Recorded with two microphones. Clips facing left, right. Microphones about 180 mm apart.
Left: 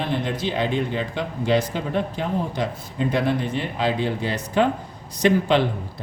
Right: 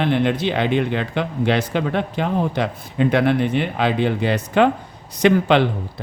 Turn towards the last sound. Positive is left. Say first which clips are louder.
# right 3 dB
turn(degrees=-70)  # may be behind; listen again after turning